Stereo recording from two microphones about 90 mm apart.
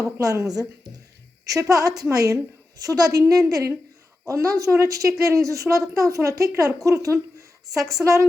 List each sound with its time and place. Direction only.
0.0 s a woman's voice: 40° right (ahead or behind)
1.7 s a woman's voice: 40° right (ahead or behind)